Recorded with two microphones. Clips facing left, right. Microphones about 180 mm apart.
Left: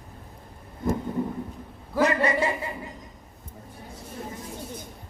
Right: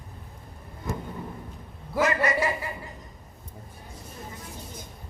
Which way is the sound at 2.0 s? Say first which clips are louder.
Left 2 dB; 30° left (ahead or behind).